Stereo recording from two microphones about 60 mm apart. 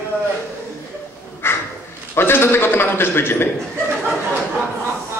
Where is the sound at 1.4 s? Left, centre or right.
Left.